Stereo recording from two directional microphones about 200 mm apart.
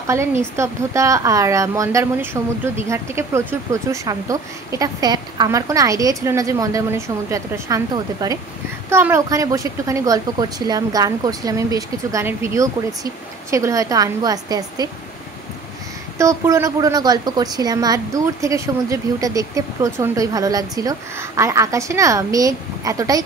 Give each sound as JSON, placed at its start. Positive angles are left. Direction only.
{"t": 0.0, "sound": "a woman's voice", "side_deg": -15}
{"t": 16.2, "sound": "a woman's voice", "side_deg": -15}